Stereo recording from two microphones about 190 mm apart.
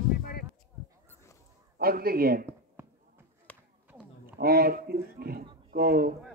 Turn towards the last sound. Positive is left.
turn(degrees=-50)  # may be behind; listen again after turning